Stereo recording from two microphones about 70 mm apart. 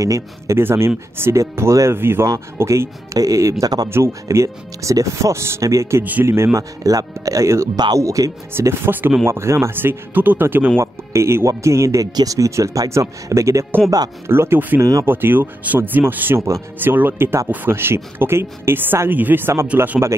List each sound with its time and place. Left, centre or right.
0.0 s speech: right
0.6 s a woman's voice: right
2.3 s a woman's voice: right
6.8 s speech: right
7.7 s speech: right
8.0 s speech: right
8.5 s a woman's voice: right
10.8 s speech: right
13.8 s speech: right
14.2 s a woman's voice: right